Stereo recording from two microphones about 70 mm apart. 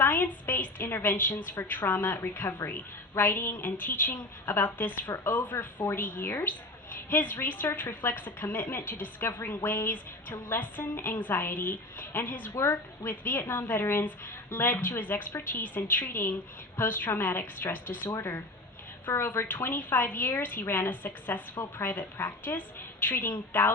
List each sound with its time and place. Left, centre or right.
0.0 s a woman's voice: left